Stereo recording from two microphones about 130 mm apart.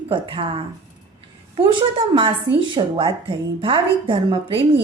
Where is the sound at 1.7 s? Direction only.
40° right (ahead or behind).